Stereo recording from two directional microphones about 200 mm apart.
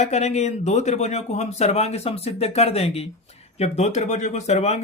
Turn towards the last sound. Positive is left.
turn(degrees=35)  # may be behind; listen again after turning